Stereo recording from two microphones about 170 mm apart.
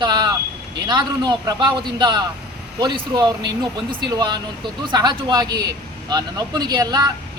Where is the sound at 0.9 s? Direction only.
25° right (ahead or behind).